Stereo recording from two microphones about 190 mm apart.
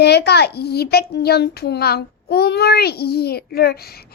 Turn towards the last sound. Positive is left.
turn(degrees=55)  # may be behind; listen again after turning